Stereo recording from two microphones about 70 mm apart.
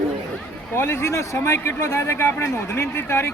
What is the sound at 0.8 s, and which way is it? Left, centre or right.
A man's voice, left.